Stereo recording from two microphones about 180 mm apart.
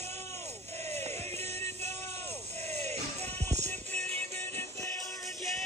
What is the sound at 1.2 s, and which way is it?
Music, 35° right (ahead or behind).